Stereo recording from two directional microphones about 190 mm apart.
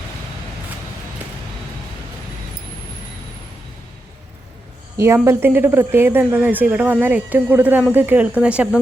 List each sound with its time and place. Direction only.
4.9 s speech: 15° right (ahead or behind)